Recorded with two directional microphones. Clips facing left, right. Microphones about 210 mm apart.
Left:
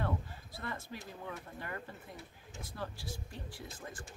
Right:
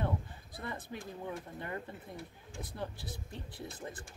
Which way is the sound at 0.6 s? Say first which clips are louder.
Right 1 dB; 20° right (ahead or behind).